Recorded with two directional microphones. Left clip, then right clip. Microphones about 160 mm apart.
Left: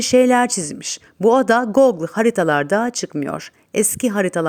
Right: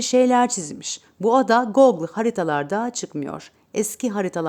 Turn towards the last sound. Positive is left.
turn(degrees=15)  # may be behind; listen again after turning